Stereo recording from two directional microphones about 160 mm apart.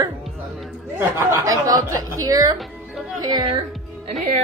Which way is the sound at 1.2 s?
20° right (ahead or behind).